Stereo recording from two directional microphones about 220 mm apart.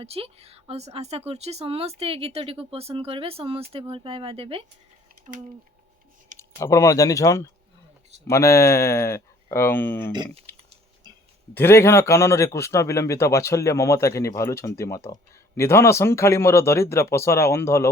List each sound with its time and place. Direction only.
0.0 s speech: 25° right (ahead or behind)
6.6 s a man's voice: 15° left (ahead or behind)
10.5 s typing: 10° left (ahead or behind)
11.5 s a man's voice: 10° left (ahead or behind)